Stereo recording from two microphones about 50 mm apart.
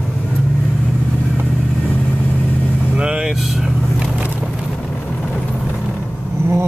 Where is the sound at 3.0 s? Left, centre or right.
Right.